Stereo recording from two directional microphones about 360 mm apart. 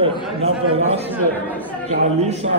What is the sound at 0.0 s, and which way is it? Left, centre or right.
A man's voice, centre.